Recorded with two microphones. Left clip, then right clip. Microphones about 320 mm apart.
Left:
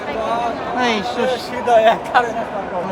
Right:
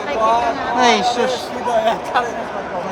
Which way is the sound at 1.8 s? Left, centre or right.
Left.